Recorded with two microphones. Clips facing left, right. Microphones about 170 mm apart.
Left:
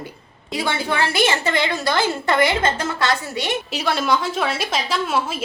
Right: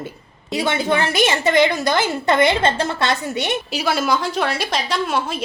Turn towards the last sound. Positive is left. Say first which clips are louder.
# right 1 dB
turn(degrees=0)  # may be behind; listen again after turning